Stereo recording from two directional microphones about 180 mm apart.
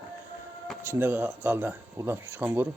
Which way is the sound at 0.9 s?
10° right (ahead or behind).